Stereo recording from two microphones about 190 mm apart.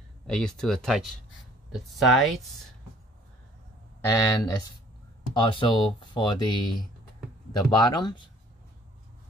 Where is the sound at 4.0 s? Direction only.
20° left (ahead or behind).